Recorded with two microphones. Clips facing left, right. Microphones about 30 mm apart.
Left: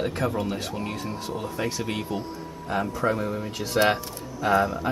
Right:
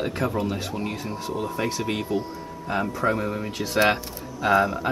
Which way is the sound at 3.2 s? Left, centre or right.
Right.